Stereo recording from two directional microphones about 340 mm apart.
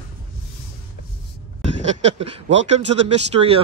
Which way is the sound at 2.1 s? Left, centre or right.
Centre.